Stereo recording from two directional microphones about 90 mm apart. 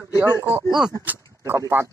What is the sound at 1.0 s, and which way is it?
Speech, 25° right (ahead or behind).